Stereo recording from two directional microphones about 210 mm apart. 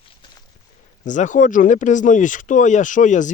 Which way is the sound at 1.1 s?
35° left (ahead or behind).